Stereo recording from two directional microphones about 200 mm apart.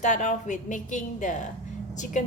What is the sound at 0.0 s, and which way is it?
A woman's voice, 35° left (ahead or behind).